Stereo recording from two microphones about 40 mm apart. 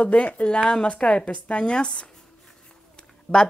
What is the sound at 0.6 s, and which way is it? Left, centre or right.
A woman's voice, left.